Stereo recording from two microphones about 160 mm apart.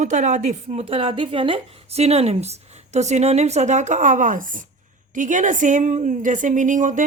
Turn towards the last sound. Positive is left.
turn(degrees=-55)  # may be behind; listen again after turning